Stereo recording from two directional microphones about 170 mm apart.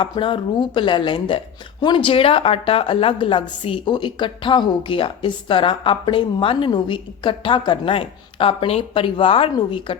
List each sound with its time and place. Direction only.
0.0 s a woman's voice: 30° left (ahead or behind)